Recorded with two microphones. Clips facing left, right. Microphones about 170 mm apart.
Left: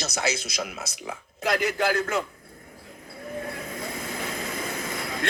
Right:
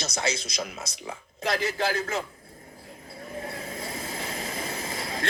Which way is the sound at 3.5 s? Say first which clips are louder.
Left 2 dB; 30° right (ahead or behind).